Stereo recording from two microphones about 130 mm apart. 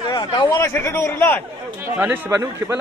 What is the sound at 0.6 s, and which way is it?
Speech, 20° left (ahead or behind).